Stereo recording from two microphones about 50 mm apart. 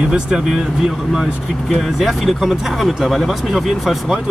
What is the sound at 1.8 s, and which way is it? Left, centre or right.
Speech, centre.